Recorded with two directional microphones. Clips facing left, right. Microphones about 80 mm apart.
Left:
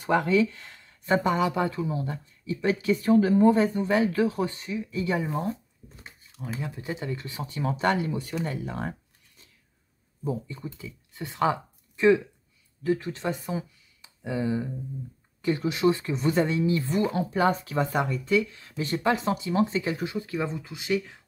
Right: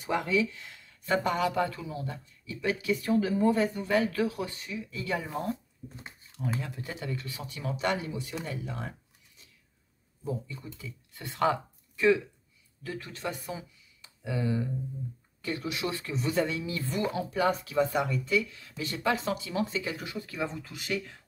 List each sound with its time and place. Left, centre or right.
0.0 s speech: left
6.3 s speech: centre
7.2 s speech: left
10.2 s speech: left
12.8 s speech: left
20.3 s speech: centre